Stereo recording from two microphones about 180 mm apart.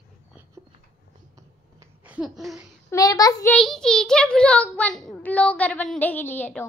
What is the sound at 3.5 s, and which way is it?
A child's voice, 5° left (ahead or behind).